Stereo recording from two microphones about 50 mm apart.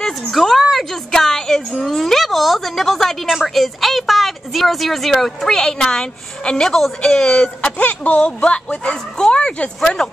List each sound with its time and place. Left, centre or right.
0.3 s a sound: centre
1.1 s music: centre
1.9 s a woman's voice: centre